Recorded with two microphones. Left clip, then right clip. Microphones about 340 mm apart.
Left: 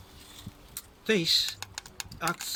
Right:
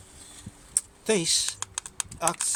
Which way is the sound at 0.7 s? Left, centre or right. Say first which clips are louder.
Right 2 dB; centre.